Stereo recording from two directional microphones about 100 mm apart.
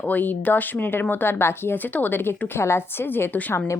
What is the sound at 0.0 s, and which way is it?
Speech, 15° left (ahead or behind).